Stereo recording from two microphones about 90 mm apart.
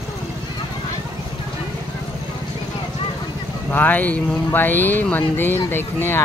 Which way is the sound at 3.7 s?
20° left (ahead or behind).